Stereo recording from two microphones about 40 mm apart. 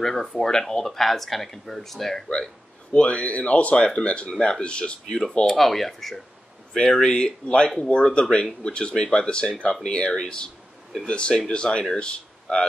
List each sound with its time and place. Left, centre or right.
0.0 s speech: centre
2.9 s speech: left
5.5 s speech: centre; by 12.6 s left